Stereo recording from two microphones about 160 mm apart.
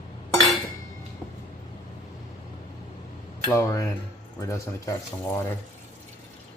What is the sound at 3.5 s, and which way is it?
Speech, 20° left (ahead or behind).